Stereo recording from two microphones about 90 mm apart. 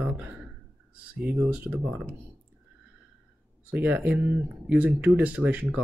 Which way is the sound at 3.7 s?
15° right (ahead or behind).